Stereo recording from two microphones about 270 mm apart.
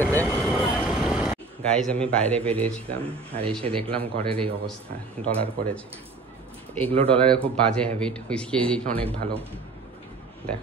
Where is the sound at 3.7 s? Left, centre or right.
Right.